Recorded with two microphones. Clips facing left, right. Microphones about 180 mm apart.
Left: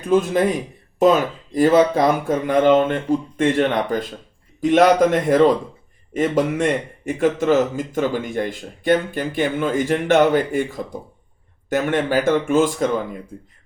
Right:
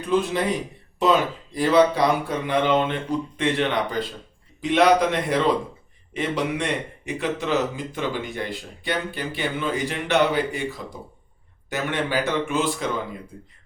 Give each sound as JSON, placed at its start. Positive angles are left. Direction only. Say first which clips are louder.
{"t": 0.1, "sound": "speech", "louder": "left 5 dB", "side_deg": 45}